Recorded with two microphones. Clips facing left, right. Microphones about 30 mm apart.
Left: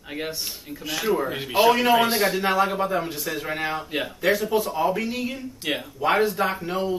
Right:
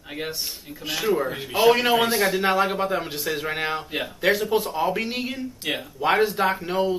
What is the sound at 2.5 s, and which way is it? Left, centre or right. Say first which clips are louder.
A man's voice: even; right.